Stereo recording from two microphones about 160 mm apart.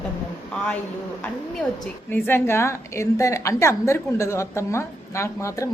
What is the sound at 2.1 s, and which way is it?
A woman's voice, 15° left (ahead or behind).